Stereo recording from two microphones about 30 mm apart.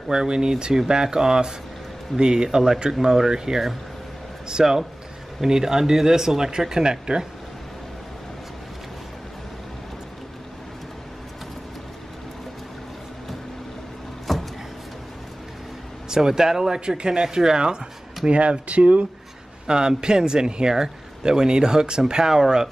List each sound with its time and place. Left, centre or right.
0.1 s speech: right
14.3 s a sound: centre
16.2 s speech: centre
18.2 s speech: right
20.0 s speech: right
22.3 s speech: centre